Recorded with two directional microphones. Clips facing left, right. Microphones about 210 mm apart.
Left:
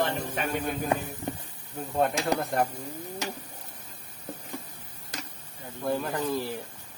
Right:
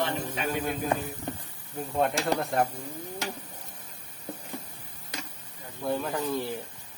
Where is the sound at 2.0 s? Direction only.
Centre (ahead or behind).